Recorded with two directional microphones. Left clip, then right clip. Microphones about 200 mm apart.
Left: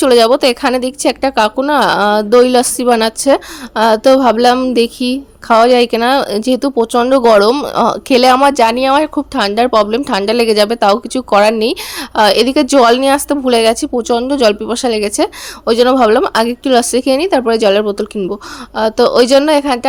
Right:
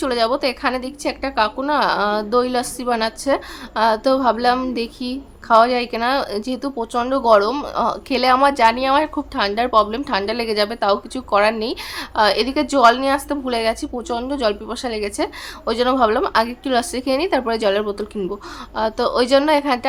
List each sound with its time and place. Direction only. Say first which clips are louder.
0.0 s speech: left 10 dB; 40° left (ahead or behind)